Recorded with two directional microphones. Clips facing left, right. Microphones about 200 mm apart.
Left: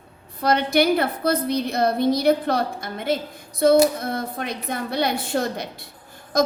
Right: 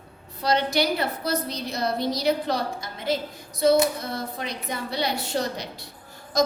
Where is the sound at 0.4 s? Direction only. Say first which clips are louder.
Left 4 dB; 55° left (ahead or behind).